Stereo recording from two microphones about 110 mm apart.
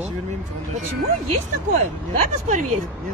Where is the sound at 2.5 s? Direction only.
90° right.